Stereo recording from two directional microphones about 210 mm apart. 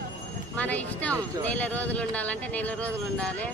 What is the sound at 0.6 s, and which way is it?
Speech, 5° left (ahead or behind).